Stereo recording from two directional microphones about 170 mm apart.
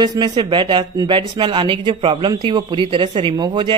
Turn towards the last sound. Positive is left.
turn(degrees=-25)  # may be behind; listen again after turning